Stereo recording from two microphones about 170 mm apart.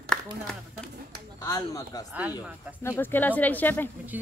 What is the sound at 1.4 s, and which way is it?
Speech, 20° left (ahead or behind).